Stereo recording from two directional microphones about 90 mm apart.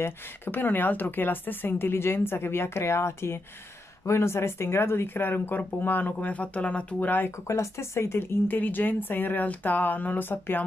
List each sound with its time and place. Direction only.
0.0 s speech: 25° left (ahead or behind)
7.4 s speech: 30° left (ahead or behind)